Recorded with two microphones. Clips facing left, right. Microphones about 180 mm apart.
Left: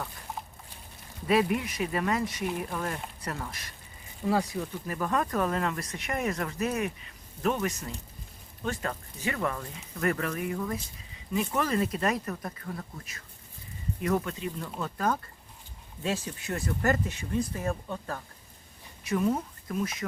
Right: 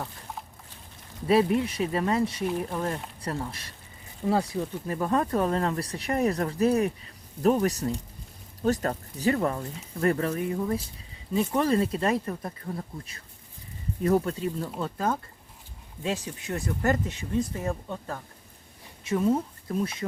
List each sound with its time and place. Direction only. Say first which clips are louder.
1.3 s speech: right 3 dB; 30° right (ahead or behind)
19.0 s speech: right 3 dB; 25° right (ahead or behind)